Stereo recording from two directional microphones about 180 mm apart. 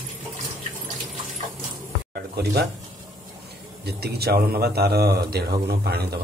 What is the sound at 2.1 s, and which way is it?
Sizzle, 65° right (ahead or behind).